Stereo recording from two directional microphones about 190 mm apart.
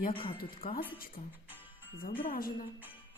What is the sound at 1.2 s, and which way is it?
Music, 30° left (ahead or behind).